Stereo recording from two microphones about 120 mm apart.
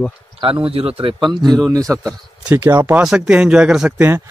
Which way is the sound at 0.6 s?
50° right (ahead or behind).